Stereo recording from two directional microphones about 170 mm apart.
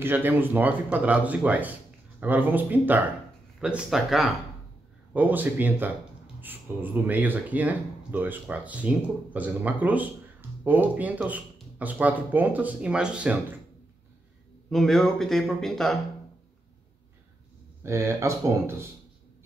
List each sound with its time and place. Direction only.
0.0 s speech: 10° right (ahead or behind)
14.7 s speech: centre (ahead or behind)
17.8 s speech: 15° right (ahead or behind)